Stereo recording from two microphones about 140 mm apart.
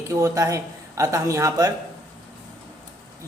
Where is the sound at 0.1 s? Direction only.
20° right (ahead or behind).